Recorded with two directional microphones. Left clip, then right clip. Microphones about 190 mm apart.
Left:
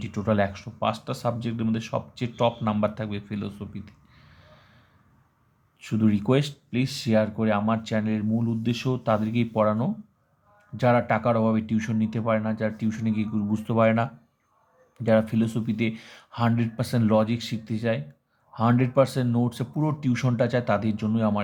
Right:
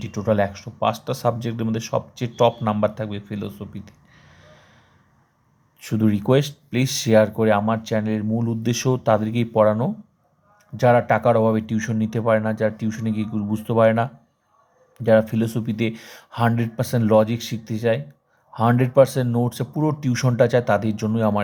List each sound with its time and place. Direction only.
0.0 s speech: 10° right (ahead or behind)
5.8 s speech: 15° right (ahead or behind)
6.7 s speech: 25° right (ahead or behind)